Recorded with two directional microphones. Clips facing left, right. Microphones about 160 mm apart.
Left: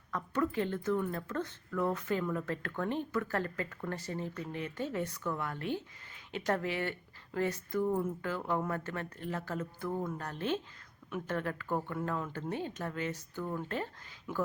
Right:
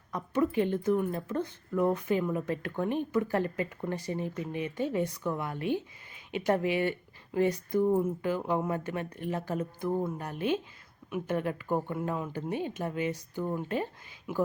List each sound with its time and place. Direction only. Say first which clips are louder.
0.1 s speech: right 4 dB; 15° right (ahead or behind)